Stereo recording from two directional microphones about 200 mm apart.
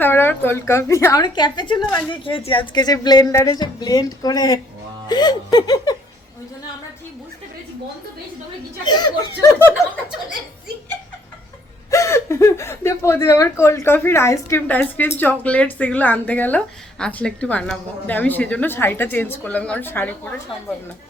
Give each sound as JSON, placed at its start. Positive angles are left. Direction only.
{"t": 0.0, "sound": "a woman's voice", "side_deg": 10}
{"t": 8.8, "sound": "speech", "side_deg": 20}
{"t": 11.9, "sound": "a woman's voice", "side_deg": 15}